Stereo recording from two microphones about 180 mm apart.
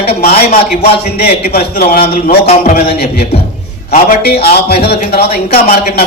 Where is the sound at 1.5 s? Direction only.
55° left (ahead or behind).